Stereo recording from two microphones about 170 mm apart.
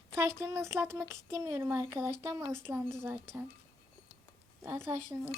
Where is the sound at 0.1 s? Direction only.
15° right (ahead or behind).